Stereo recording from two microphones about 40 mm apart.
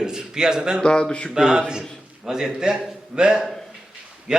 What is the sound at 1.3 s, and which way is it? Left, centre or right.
A man's voice, centre.